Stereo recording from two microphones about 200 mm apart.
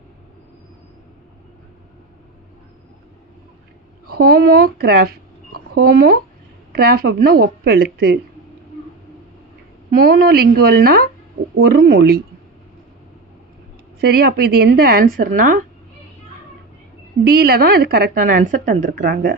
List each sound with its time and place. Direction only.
4.1 s a woman's voice: 50° right (ahead or behind)
10.0 s a woman's voice: 50° right (ahead or behind)
14.0 s a woman's voice: 50° right (ahead or behind)
17.2 s a woman's voice: 50° right (ahead or behind)